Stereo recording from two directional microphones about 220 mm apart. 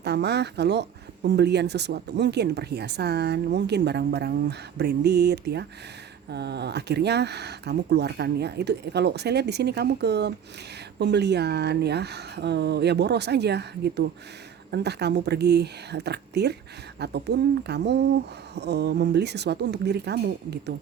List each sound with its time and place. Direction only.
0.0 s speech: 50° right (ahead or behind)